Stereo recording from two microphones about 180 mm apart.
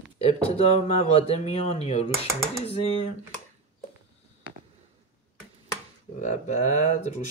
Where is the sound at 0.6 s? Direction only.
35° left (ahead or behind).